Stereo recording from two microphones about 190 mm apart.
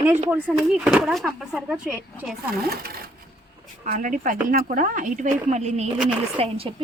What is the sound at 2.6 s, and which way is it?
Speech, 50° right (ahead or behind).